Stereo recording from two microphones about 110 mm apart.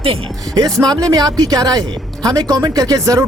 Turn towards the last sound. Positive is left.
turn(degrees=-30)  # may be behind; listen again after turning